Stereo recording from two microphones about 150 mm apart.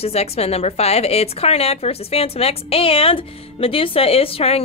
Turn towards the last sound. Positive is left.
turn(degrees=40)  # may be behind; listen again after turning